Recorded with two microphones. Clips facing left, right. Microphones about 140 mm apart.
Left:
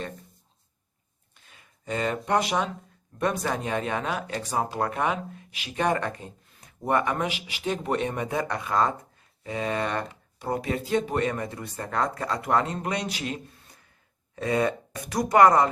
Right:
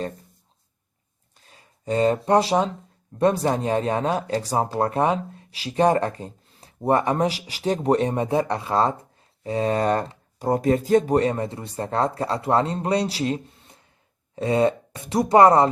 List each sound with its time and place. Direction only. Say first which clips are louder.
1.4 s speech: right 3 dB; 35° right (ahead or behind)